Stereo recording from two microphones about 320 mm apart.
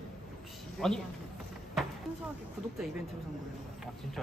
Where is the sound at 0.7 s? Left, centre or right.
Centre.